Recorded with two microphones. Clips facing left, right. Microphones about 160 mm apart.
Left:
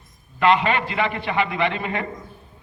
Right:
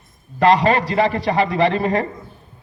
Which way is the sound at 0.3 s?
40° right (ahead or behind).